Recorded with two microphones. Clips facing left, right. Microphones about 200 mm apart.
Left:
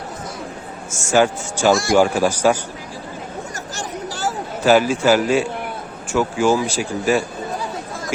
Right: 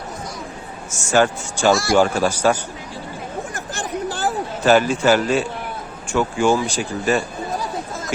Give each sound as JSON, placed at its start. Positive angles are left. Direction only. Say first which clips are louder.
{"t": 1.1, "sound": "speech", "louder": "left 1 dB", "side_deg": 10}
{"t": 3.5, "sound": "a sound", "louder": "right 2 dB", "side_deg": -55}
{"t": 4.6, "sound": "speech", "louder": "left 1 dB", "side_deg": 5}